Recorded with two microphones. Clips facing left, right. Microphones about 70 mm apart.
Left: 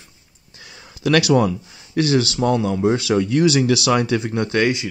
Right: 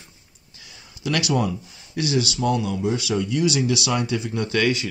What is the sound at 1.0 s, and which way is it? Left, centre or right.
Speech, left.